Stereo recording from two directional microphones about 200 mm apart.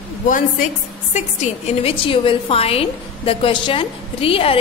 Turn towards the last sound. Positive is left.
turn(degrees=30)  # may be behind; listen again after turning